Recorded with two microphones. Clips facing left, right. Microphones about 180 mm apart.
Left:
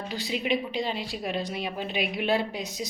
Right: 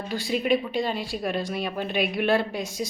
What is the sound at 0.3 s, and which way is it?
Speech, 50° right (ahead or behind).